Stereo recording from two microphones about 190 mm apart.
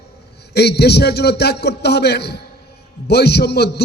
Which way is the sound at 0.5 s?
60° left (ahead or behind).